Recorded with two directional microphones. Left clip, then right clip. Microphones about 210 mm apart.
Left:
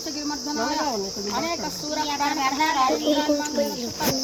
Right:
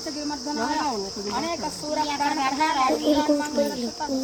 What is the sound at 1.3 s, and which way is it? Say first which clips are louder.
Speech: even; 5° right (ahead or behind).